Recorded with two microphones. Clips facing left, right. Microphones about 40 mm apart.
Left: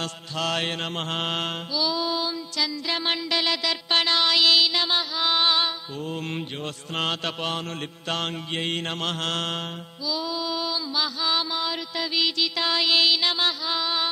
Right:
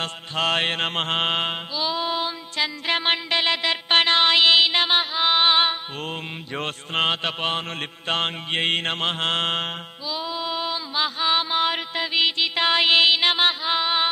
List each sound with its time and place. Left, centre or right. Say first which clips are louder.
0.0 s mantra: right 4 dB; right